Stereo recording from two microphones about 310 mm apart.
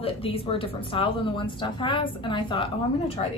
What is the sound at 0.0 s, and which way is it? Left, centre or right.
Speech, centre.